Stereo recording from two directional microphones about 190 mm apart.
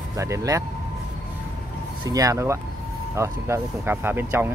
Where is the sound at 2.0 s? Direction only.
20° right (ahead or behind).